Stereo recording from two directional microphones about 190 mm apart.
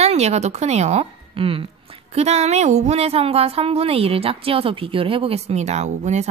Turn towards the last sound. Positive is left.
turn(degrees=-35)  # may be behind; listen again after turning